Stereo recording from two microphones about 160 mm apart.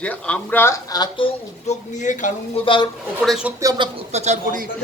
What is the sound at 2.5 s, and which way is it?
Speech, 35° left (ahead or behind).